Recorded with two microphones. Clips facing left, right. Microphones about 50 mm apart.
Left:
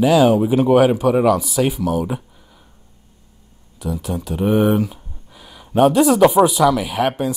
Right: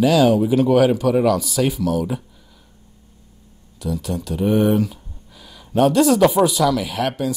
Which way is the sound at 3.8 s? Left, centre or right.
Centre.